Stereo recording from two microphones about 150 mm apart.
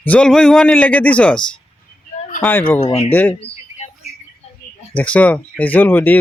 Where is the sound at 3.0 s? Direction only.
15° left (ahead or behind).